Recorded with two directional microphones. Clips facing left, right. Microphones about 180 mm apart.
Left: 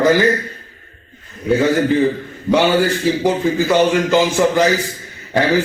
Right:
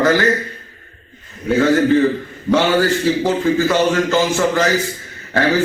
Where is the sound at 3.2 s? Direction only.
15° left (ahead or behind).